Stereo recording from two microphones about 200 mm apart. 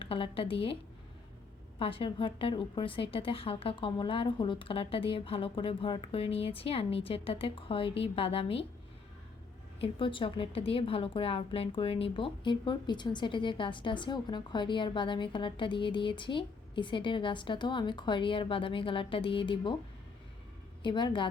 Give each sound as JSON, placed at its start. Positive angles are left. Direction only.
{"t": 0.0, "sound": "a woman's voice", "side_deg": 25}
{"t": 1.8, "sound": "a woman's voice", "side_deg": 25}
{"t": 9.8, "sound": "a woman's voice", "side_deg": 25}
{"t": 20.8, "sound": "a woman's voice", "side_deg": 25}